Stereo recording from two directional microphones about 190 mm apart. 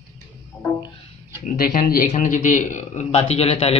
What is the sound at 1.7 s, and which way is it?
Speech, 45° left (ahead or behind).